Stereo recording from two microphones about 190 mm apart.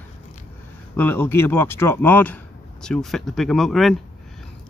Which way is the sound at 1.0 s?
10° left (ahead or behind).